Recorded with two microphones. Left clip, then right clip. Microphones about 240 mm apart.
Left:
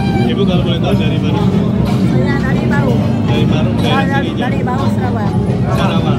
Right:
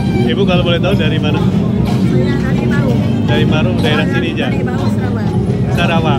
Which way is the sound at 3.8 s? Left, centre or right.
Centre.